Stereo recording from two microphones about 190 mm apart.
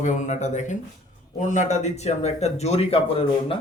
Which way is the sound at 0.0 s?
40° left (ahead or behind).